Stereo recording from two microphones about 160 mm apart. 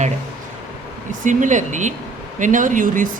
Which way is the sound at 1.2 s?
50° right (ahead or behind).